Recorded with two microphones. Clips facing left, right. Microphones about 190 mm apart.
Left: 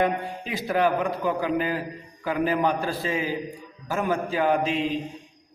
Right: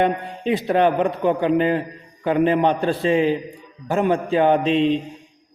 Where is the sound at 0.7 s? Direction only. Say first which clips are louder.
Right 4 dB; 25° right (ahead or behind).